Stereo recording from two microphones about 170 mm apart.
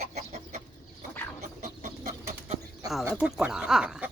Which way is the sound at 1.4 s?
45° right (ahead or behind).